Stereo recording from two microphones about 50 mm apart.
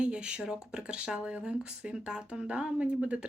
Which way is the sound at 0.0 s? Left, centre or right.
Right.